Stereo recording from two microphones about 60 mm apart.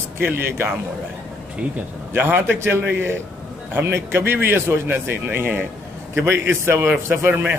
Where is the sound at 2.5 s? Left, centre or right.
Right.